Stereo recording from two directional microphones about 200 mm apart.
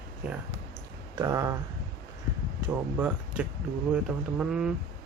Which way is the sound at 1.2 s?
15° right (ahead or behind).